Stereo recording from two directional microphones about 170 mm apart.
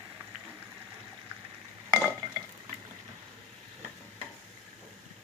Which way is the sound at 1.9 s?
10° right (ahead or behind).